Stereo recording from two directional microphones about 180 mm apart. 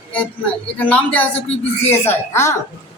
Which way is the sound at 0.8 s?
10° left (ahead or behind).